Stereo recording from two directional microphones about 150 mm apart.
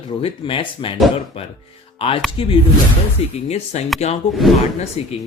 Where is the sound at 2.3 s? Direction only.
35° left (ahead or behind).